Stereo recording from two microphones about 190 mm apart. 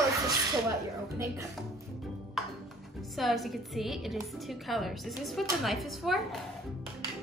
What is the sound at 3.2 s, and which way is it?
A woman's voice, centre (ahead or behind).